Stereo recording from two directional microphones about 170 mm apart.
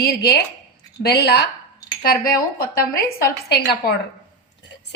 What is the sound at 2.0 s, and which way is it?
A woman's voice, 60° left (ahead or behind).